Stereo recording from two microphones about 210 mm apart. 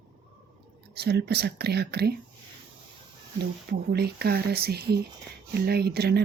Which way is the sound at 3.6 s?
50° right (ahead or behind).